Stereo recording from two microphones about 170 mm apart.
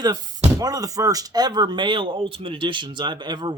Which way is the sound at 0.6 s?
20° right (ahead or behind).